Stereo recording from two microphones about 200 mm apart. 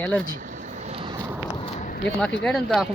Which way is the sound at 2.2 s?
5° left (ahead or behind).